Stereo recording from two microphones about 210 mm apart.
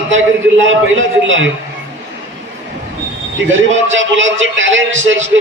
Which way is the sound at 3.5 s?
65° right (ahead or behind).